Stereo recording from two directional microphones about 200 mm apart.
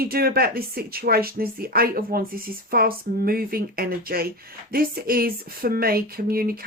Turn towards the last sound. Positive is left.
turn(degrees=-50)  # may be behind; listen again after turning